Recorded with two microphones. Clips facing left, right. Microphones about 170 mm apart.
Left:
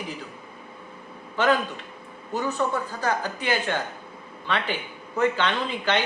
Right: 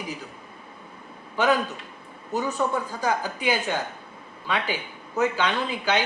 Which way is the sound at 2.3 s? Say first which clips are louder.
Even; 10° right (ahead or behind).